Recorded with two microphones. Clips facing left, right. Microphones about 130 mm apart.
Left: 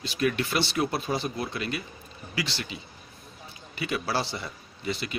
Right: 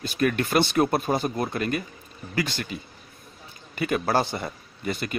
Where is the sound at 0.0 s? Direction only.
50° right (ahead or behind).